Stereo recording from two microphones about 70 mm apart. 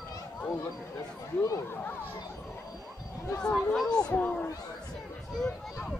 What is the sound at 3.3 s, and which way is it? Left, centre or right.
Speech, centre.